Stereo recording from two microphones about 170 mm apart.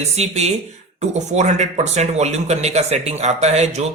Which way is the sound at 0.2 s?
40° right (ahead or behind).